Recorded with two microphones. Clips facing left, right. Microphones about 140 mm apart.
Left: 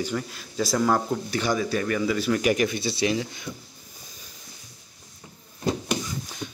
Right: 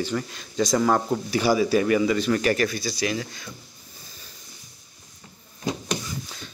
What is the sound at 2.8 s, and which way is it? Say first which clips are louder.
Speech: left 2 dB; 25° left (ahead or behind).